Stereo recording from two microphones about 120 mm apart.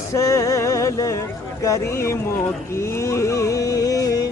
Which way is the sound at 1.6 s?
25° left (ahead or behind).